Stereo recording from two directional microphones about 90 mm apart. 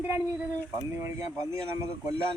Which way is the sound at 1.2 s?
40° right (ahead or behind).